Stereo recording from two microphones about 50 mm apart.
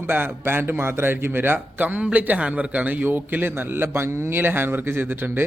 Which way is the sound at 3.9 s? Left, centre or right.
Right.